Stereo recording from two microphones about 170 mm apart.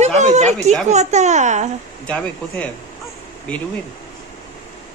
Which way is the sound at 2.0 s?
10° left (ahead or behind).